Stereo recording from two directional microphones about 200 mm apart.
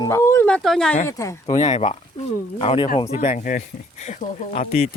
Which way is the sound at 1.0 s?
15° left (ahead or behind).